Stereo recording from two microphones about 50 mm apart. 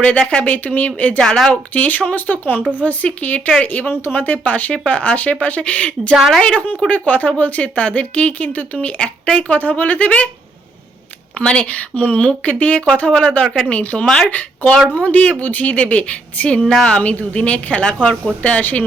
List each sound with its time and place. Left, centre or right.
0.0 s speech: left
0.4 s speech: left
1.2 s speech: centre
1.7 s speech: left
11.3 s speech: left
16.6 s speech: centre
17.0 s speech: left